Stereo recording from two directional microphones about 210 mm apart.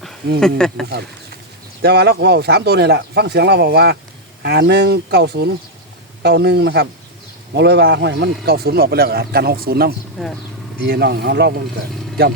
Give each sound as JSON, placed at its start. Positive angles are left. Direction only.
{"t": 0.3, "sound": "speech", "side_deg": 0}
{"t": 1.8, "sound": "a man's voice", "side_deg": -50}
{"t": 10.2, "sound": "speech", "side_deg": 0}
{"t": 10.8, "sound": "a man's voice", "side_deg": -50}